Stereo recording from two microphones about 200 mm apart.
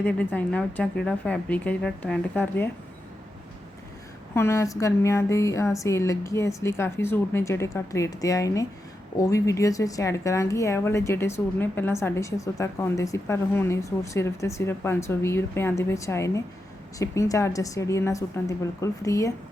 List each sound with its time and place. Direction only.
0.0 s speech: 5° left (ahead or behind)
4.4 s speech: 15° left (ahead or behind)